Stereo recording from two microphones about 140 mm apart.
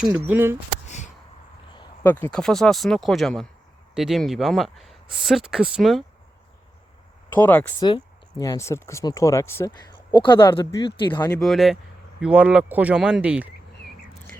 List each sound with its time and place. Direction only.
0.1 s speech: 15° right (ahead or behind)
0.9 s a sound: 55° left (ahead or behind)
2.0 s speech: 10° left (ahead or behind); by 6.0 s 5° right (ahead or behind)
7.3 s speech: 10° left (ahead or behind)
7.8 s speech: 35° left (ahead or behind)
8.4 s speech: 20° left (ahead or behind)
10.1 s speech: 35° left (ahead or behind)
11.3 s speech: centre (ahead or behind)